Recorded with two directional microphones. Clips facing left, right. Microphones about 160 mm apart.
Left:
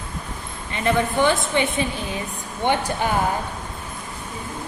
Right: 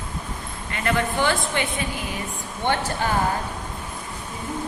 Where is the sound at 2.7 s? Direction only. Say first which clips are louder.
Left 2 dB; 15° left (ahead or behind).